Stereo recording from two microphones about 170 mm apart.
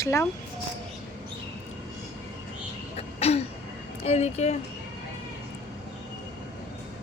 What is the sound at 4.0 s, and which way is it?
Speech, 40° left (ahead or behind).